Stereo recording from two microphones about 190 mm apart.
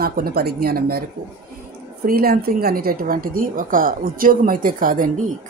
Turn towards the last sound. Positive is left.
turn(degrees=-45)  # may be behind; listen again after turning